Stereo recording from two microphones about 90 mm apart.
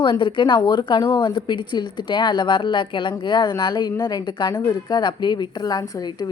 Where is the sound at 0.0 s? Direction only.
60° left (ahead or behind).